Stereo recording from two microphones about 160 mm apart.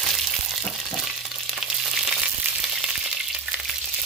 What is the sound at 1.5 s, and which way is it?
Frying, 5° right (ahead or behind).